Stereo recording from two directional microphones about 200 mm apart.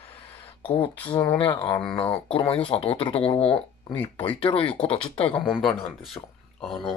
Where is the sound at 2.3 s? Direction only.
30° left (ahead or behind).